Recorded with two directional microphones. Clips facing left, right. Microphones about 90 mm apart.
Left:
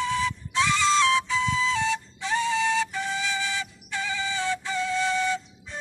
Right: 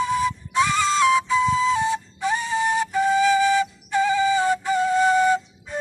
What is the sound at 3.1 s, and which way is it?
Flute, 40° right (ahead or behind).